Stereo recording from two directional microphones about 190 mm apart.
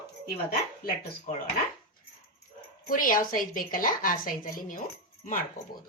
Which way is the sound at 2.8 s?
45° left (ahead or behind).